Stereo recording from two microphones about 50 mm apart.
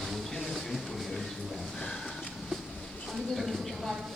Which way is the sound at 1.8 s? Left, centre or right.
Centre.